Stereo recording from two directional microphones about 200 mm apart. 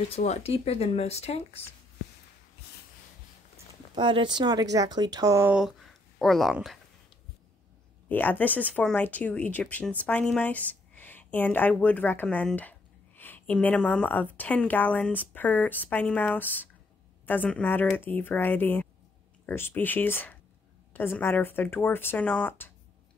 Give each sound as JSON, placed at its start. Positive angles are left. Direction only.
{"t": 0.1, "sound": "speech", "side_deg": 30}
{"t": 3.9, "sound": "speech", "side_deg": -25}
{"t": 8.1, "sound": "speech", "side_deg": 10}